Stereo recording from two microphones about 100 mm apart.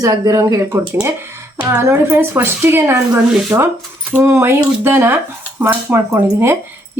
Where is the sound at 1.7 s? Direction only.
20° right (ahead or behind).